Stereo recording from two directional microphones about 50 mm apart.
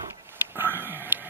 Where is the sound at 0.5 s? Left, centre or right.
Right.